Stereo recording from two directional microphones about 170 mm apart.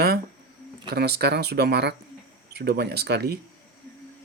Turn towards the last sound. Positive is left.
turn(degrees=-70)  # may be behind; listen again after turning